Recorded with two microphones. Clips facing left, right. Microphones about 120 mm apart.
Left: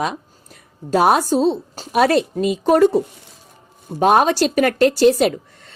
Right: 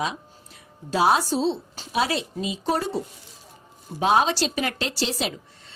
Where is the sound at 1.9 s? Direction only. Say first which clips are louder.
Left 9 dB; 60° left (ahead or behind).